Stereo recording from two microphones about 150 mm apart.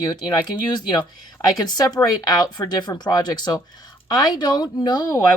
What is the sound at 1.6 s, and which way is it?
Speech, 25° left (ahead or behind).